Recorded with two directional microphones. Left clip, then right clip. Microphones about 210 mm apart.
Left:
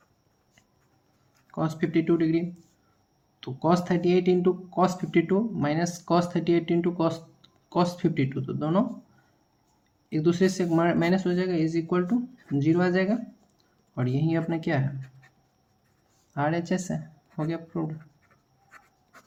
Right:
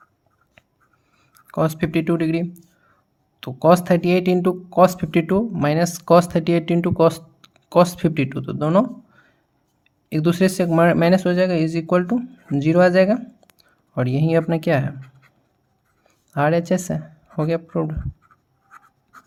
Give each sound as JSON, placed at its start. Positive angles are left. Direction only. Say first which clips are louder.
{"t": 1.5, "sound": "speech", "louder": "right 8 dB", "side_deg": -45}
{"t": 10.1, "sound": "speech", "louder": "right 5 dB", "side_deg": -50}
{"t": 16.3, "sound": "speech", "louder": "right 9 dB", "side_deg": -45}